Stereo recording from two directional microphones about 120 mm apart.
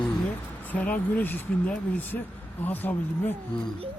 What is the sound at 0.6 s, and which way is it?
Speech, 15° left (ahead or behind).